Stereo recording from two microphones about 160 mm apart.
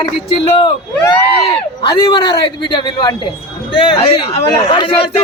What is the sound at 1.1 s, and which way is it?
A man's voice, 30° left (ahead or behind).